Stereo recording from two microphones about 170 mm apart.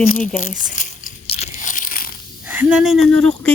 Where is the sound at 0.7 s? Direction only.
50° left (ahead or behind).